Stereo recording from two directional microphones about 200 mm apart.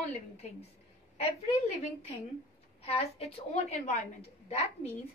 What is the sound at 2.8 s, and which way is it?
A woman's voice, 30° left (ahead or behind).